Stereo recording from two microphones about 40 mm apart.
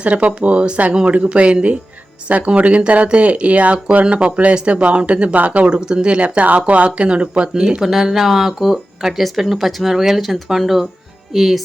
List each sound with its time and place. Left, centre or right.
0.0 s speech: right; by 11.6 s centre